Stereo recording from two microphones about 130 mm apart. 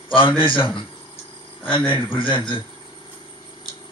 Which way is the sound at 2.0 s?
40° left (ahead or behind).